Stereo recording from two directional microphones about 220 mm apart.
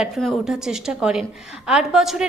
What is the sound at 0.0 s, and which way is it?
A woman's voice, centre (ahead or behind).